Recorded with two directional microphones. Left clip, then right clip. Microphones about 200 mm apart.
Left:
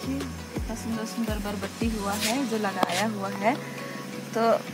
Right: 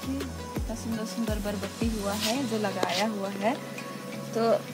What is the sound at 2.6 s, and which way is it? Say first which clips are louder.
Speech: left 1 dB; 35° right (ahead or behind).